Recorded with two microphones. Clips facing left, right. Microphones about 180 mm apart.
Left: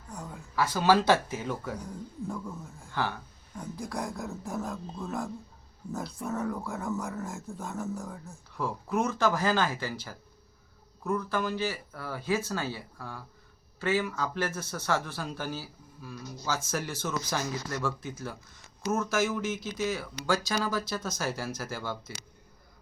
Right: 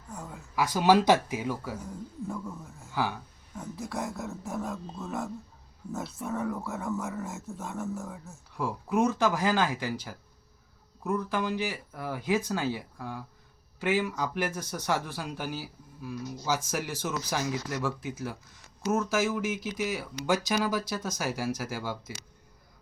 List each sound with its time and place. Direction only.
0.1 s a sound: 5° right (ahead or behind)
0.6 s a man's voice: 15° right (ahead or behind)
8.6 s a man's voice: 15° right (ahead or behind)